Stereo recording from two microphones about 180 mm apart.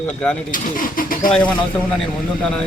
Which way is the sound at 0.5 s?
50° left (ahead or behind).